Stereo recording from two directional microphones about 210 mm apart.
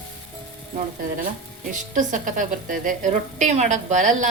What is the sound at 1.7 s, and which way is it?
A woman's voice, 40° right (ahead or behind).